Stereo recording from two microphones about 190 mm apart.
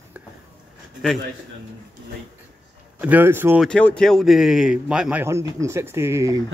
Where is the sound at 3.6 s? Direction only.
5° left (ahead or behind); by 6.4 s 15° right (ahead or behind).